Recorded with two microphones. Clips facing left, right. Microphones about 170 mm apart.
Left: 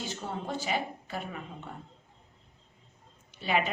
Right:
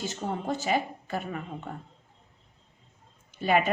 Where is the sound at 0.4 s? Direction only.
45° right (ahead or behind).